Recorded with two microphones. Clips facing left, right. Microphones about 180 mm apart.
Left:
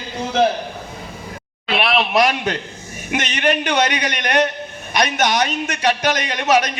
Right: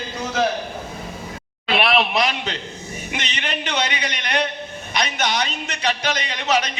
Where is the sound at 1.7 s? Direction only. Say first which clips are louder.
Left 1 dB; centre (ahead or behind).